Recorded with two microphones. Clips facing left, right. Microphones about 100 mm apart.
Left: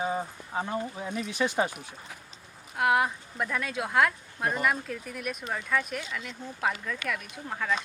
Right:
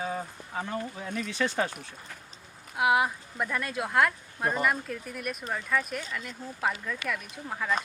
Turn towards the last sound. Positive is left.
turn(degrees=0)  # may be behind; listen again after turning